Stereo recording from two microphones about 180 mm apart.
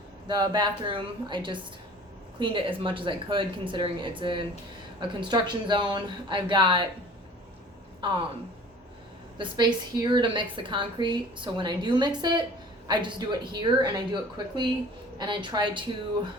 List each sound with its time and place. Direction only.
0.3 s a woman's voice: 25° right (ahead or behind)
8.0 s a woman's voice: 25° right (ahead or behind)
9.4 s a woman's voice: 25° right (ahead or behind)